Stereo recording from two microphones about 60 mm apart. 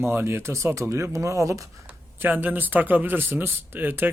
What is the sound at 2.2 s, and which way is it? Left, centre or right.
Speech, right.